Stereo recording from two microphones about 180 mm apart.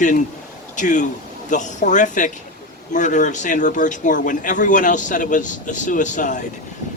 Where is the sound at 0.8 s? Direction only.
45° left (ahead or behind).